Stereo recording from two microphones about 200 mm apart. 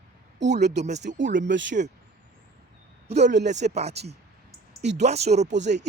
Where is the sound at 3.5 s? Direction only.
35° right (ahead or behind).